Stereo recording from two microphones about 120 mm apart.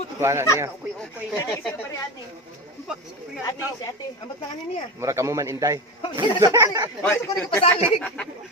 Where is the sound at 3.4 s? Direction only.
30° left (ahead or behind).